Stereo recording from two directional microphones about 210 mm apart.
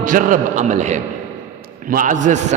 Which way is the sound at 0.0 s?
40° right (ahead or behind).